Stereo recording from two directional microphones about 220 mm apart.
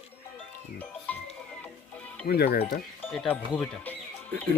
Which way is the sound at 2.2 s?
45° left (ahead or behind).